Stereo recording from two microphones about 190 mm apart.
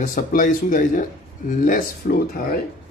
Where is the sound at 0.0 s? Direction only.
45° left (ahead or behind).